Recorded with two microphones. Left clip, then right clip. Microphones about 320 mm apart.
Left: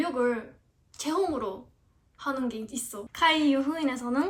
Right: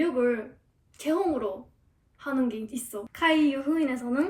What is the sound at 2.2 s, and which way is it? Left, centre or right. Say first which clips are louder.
A woman's voice: right 2 dB; centre.